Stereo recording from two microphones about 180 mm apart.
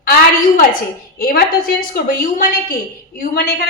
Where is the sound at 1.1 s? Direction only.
55° left (ahead or behind).